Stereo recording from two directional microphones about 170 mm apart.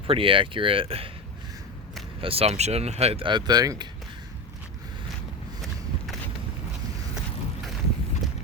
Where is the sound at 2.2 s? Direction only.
35° right (ahead or behind).